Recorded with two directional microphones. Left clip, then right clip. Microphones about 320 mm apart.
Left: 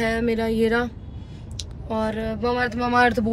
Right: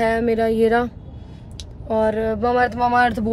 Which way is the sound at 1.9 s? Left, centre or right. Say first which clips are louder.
Right 7 dB; right.